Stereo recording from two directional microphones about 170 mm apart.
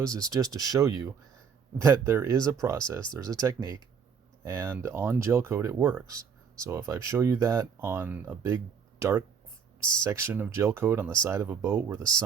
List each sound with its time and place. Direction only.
0.0 s speech: 20° right (ahead or behind)